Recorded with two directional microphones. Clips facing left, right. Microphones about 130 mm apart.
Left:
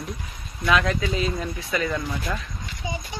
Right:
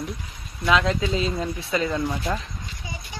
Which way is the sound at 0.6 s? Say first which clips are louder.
Right 1 dB; 20° right (ahead or behind).